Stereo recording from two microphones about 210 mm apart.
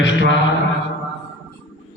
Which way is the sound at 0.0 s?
60° left (ahead or behind).